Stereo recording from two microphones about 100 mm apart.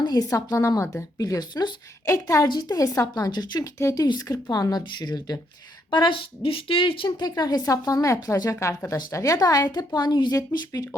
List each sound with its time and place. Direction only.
0.0 s speech: 40° left (ahead or behind)
3.8 s speech: 30° left (ahead or behind)
4.0 s speech: 40° left (ahead or behind)
5.9 s a woman's voice: 55° left (ahead or behind)
7.2 s speech: 40° left (ahead or behind)